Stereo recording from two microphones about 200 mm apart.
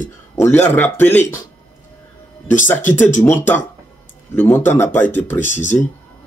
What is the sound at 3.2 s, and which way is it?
A man's voice, 10° left (ahead or behind).